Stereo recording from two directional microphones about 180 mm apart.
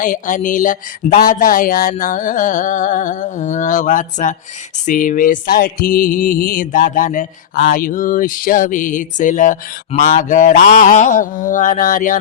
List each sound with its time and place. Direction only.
0.0 s music: 50° left (ahead or behind)